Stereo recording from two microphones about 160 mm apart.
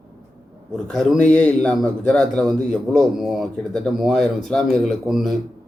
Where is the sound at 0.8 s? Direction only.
5° left (ahead or behind).